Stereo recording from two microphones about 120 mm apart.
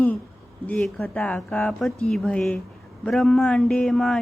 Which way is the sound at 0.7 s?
15° left (ahead or behind).